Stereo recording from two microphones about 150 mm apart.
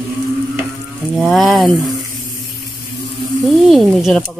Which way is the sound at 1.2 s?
Centre (ahead or behind).